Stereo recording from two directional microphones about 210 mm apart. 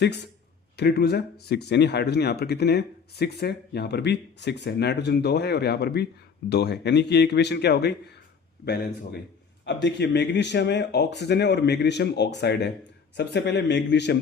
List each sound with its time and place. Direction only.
0.8 s speech: 50° left (ahead or behind)
9.6 s a man's voice: 55° left (ahead or behind)